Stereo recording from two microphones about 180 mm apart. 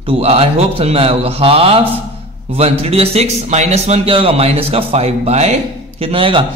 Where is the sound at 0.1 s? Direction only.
30° right (ahead or behind).